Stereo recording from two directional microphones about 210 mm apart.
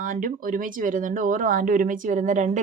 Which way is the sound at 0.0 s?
40° right (ahead or behind).